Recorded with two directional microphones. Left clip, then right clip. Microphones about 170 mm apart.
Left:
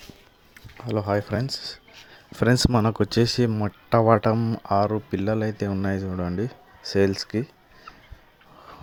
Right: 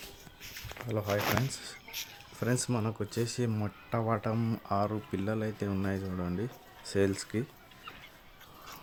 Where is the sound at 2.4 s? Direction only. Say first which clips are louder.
Left 12 dB; 55° left (ahead or behind).